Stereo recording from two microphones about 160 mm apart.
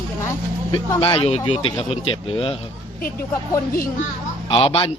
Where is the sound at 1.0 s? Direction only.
35° left (ahead or behind).